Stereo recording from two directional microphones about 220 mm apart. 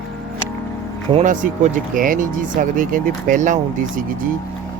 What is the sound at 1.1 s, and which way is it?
Speech, 35° right (ahead or behind).